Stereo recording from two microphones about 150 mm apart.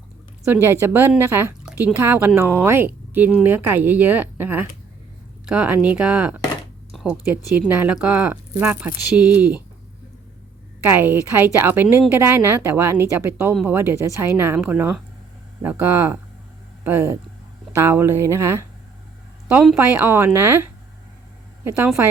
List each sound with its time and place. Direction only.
0.4 s speech: 15° right (ahead or behind)
6.9 s a sound: 5° right (ahead or behind)
7.7 s speech: 10° right (ahead or behind)
10.8 s speech: 15° right (ahead or behind)
19.7 s speech: 15° right (ahead or behind)